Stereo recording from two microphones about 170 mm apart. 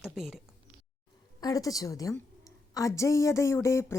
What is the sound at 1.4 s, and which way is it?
A woman's voice, 20° left (ahead or behind).